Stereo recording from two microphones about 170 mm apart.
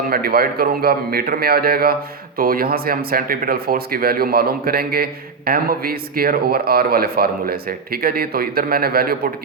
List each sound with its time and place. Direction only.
0.1 s speech: 60° right (ahead or behind)